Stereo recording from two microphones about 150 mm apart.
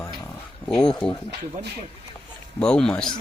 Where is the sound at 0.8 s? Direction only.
5° left (ahead or behind).